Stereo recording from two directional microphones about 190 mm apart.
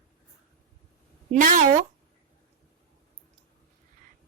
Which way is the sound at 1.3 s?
45° right (ahead or behind).